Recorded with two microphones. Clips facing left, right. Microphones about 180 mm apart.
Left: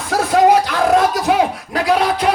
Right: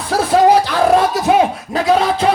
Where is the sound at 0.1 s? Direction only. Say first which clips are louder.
Right 1 dB; 30° right (ahead or behind).